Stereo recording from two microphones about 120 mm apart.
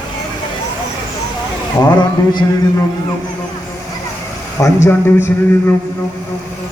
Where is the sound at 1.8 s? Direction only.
35° left (ahead or behind).